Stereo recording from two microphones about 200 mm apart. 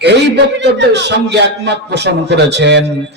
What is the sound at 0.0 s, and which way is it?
A man's voice, 60° right (ahead or behind).